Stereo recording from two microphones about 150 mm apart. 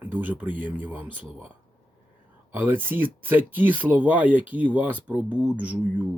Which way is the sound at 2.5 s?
15° right (ahead or behind).